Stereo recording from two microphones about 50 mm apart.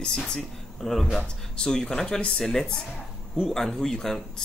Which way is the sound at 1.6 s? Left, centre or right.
Centre.